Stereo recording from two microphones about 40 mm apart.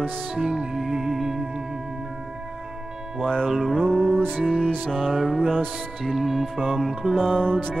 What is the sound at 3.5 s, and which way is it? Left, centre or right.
Singing bowl, centre.